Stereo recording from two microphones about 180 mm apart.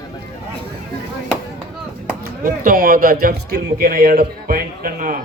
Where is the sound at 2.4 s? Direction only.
50° right (ahead or behind).